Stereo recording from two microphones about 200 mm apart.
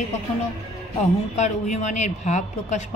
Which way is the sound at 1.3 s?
35° left (ahead or behind).